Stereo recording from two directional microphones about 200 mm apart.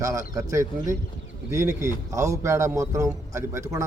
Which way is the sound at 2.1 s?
15° right (ahead or behind).